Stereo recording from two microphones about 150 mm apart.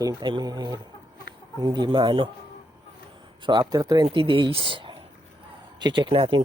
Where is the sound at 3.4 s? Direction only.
30° right (ahead or behind).